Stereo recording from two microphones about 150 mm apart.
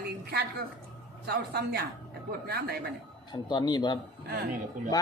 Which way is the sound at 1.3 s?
90° right.